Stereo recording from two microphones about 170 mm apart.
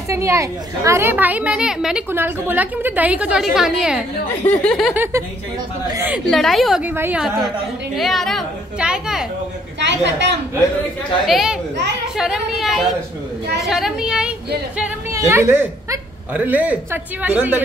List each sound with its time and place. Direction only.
0.1 s a woman's voice: 15° right (ahead or behind)
2.0 s a woman's voice: 15° right (ahead or behind); by 4.9 s 5° left (ahead or behind)
4.9 s a woman's voice: 15° right (ahead or behind)
6.3 s a woman's voice: centre (ahead or behind)
9.8 s a woman's voice: 90° right
11.2 s a woman's voice: centre (ahead or behind)
15.0 s a woman's voice: 15° right (ahead or behind)